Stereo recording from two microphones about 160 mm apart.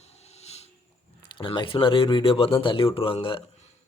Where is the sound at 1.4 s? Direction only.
30° left (ahead or behind).